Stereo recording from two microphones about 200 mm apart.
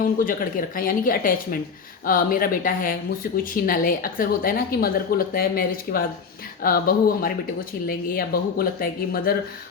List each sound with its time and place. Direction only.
0.0 s speech: 45° left (ahead or behind)